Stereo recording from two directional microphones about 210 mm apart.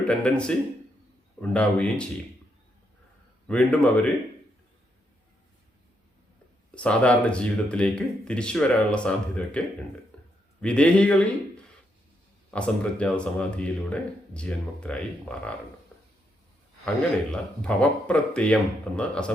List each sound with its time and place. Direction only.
0.0 s speech: 5° left (ahead or behind)
3.4 s speech: 5° left (ahead or behind)
6.7 s speech: 5° left (ahead or behind)
10.1 s a sound: 5° left (ahead or behind)
10.6 s speech: 5° left (ahead or behind)
12.5 s speech: 5° left (ahead or behind)
16.8 s speech: centre (ahead or behind)